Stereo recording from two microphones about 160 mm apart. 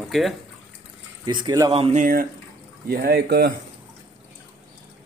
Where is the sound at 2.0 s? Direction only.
60° right (ahead or behind).